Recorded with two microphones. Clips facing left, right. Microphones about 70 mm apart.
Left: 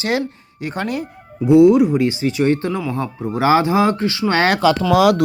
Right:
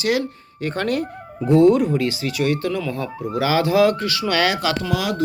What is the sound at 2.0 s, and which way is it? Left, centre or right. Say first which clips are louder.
Speech: left 4 dB; left.